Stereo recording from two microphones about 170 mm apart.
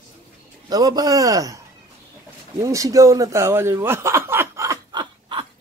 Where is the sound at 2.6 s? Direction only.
20° right (ahead or behind).